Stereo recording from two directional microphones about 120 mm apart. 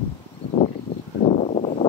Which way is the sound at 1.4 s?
65° left (ahead or behind).